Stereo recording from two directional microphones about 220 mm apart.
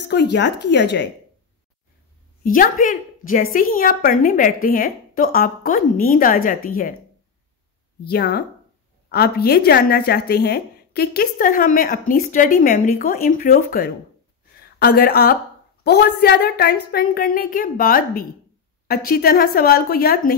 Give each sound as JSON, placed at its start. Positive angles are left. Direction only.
{"t": 0.1, "sound": "a woman's voice", "side_deg": 50}
{"t": 2.4, "sound": "speech", "side_deg": 40}
{"t": 8.0, "sound": "a woman's voice", "side_deg": 45}